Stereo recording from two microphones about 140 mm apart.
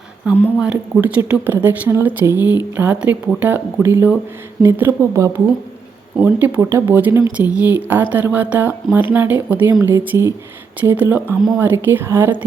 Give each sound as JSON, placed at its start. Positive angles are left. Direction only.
{"t": 0.3, "sound": "speech", "side_deg": -10}